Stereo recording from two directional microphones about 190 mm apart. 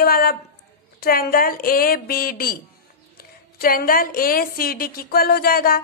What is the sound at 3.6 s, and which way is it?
Speech, 50° left (ahead or behind).